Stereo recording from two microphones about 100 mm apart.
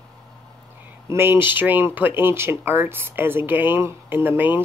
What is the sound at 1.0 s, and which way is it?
Speech, 25° right (ahead or behind).